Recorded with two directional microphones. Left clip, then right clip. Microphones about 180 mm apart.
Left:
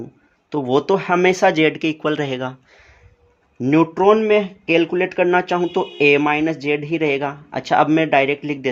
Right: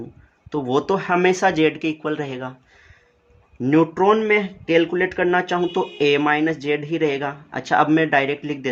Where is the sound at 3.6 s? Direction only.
25° left (ahead or behind).